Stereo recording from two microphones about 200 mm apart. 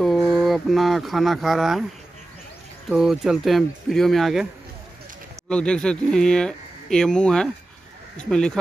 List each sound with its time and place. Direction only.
0.2 s speech: centre (ahead or behind)
2.9 s speech: 5° right (ahead or behind)
5.5 s speech: 5° left (ahead or behind)